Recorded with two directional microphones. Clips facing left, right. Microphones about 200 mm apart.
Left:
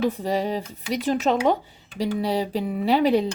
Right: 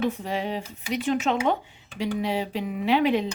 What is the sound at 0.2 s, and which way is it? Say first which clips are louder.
Speech: left 4 dB; 40° left (ahead or behind).